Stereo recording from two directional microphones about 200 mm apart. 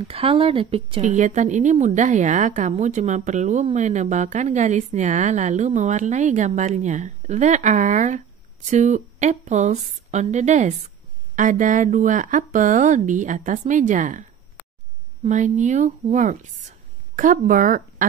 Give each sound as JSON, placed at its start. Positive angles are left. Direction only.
{"t": 0.1, "sound": "speech", "side_deg": -25}
{"t": 1.0, "sound": "a woman's voice", "side_deg": -35}
{"t": 15.2, "sound": "speech", "side_deg": -40}